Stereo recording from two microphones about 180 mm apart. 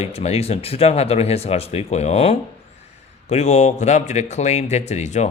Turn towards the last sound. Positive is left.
turn(degrees=40)  # may be behind; listen again after turning